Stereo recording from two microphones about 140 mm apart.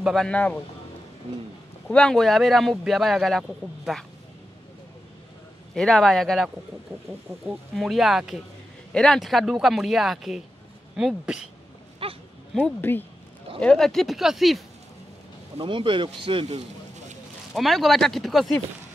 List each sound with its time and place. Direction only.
0.0 s a man's voice: centre (ahead or behind)
1.9 s speech: 5° left (ahead or behind)
5.8 s speech: 5° left (ahead or behind)
12.0 s a sound: 40° right (ahead or behind)
12.9 s a man's voice: 15° left (ahead or behind); by 14.6 s centre (ahead or behind)
15.5 s speech: 40° right (ahead or behind)
17.6 s speech: centre (ahead or behind)